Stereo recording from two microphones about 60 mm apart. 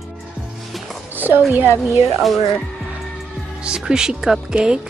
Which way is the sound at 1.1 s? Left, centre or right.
Right.